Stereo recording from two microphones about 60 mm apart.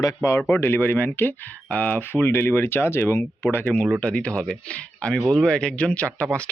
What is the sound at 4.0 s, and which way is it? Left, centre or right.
Speech, left.